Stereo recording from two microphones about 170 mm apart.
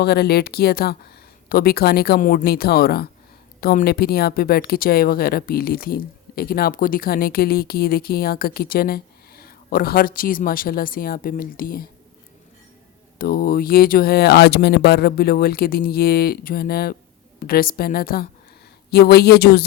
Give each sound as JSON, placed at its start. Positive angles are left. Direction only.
{"t": 0.0, "sound": "speech", "side_deg": 70}
{"t": 13.1, "sound": "speech", "side_deg": 60}